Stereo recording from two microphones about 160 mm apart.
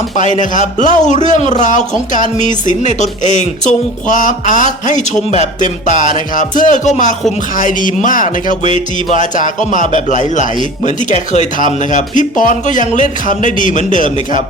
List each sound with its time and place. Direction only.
0.5 s speech: 50° left (ahead or behind)